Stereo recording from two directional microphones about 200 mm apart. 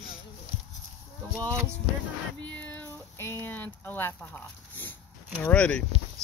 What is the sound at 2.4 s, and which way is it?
Speech, 5° left (ahead or behind).